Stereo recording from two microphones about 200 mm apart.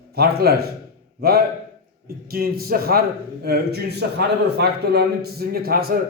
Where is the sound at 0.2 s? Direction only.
50° right (ahead or behind).